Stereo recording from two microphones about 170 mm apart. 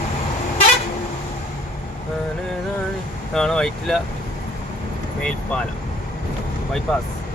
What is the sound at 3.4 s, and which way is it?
Speech, 5° left (ahead or behind).